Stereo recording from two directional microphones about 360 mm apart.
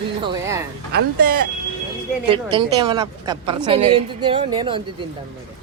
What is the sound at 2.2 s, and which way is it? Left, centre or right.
A woman's voice, centre.